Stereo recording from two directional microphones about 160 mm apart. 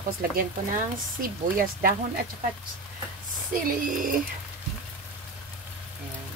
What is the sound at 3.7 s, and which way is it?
Speech, 60° right (ahead or behind).